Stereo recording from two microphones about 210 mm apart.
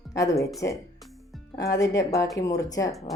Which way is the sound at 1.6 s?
15° left (ahead or behind).